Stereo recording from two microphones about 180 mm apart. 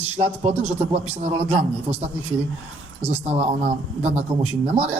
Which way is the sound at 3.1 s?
35° right (ahead or behind).